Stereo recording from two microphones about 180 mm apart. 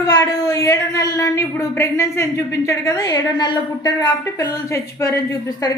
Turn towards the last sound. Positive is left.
turn(degrees=20)  # may be behind; listen again after turning